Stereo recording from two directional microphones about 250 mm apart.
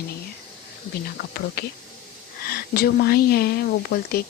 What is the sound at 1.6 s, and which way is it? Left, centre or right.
A woman's voice, left.